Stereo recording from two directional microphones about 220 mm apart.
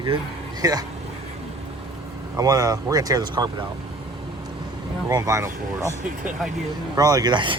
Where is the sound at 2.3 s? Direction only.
15° right (ahead or behind).